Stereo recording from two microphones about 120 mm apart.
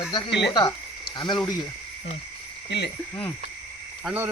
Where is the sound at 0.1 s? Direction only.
40° left (ahead or behind).